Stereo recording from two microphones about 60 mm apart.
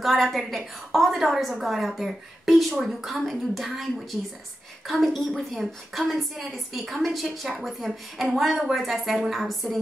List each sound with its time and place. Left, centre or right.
0.0 s a woman's voice: centre